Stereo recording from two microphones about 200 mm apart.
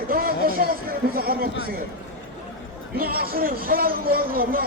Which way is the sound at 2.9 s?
50° right (ahead or behind).